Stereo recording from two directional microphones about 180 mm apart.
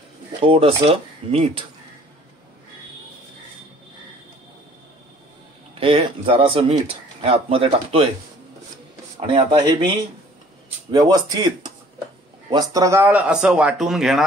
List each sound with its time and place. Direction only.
0.5 s speech: 30° right (ahead or behind)
5.8 s speech: 30° right (ahead or behind)
9.3 s speech: 25° right (ahead or behind)
10.9 s a man's voice: 20° right (ahead or behind); by 14.2 s centre (ahead or behind)